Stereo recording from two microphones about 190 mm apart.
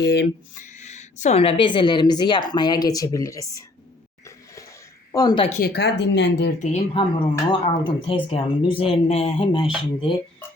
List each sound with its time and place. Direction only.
0.0 s speech: 65° left (ahead or behind)
0.5 s a woman's voice: 40° left (ahead or behind); by 3.6 s 15° left (ahead or behind)
5.1 s a woman's voice: 25° left (ahead or behind)
5.5 s speech: 45° left (ahead or behind)
5.7 s speech: 65° left (ahead or behind)
6.6 s speech: 35° left (ahead or behind)
7.5 s a woman's voice: 25° left (ahead or behind)